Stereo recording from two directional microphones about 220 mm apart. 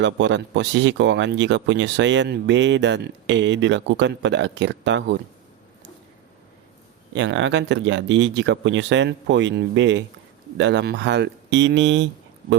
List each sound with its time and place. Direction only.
0.0 s speech: 55° right (ahead or behind)
7.1 s speech: 55° right (ahead or behind)